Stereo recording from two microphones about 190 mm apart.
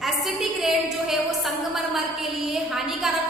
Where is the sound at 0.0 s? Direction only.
Centre (ahead or behind).